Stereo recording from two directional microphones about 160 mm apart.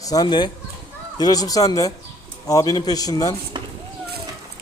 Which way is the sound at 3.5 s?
30° right (ahead or behind).